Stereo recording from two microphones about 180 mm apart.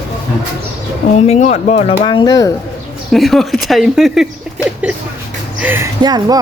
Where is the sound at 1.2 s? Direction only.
40° left (ahead or behind).